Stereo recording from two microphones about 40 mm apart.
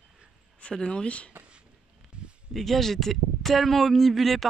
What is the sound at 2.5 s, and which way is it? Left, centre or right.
Speech, centre.